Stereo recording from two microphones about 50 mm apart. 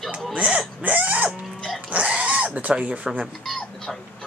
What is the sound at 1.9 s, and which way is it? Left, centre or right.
Pig, right.